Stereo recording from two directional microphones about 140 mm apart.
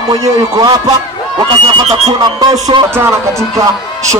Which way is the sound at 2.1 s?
30° right (ahead or behind).